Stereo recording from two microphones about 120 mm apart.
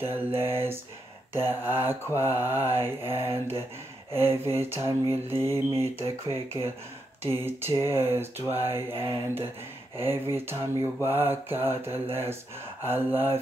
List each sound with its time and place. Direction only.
0.0 s speech: 15° right (ahead or behind)
0.4 s mantra: 20° right (ahead or behind)
9.9 s mantra: 20° right (ahead or behind)
12.8 s speech: 15° right (ahead or behind)